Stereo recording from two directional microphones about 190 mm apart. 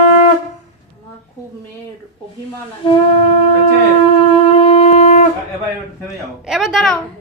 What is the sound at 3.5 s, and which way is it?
Shofar, 30° left (ahead or behind).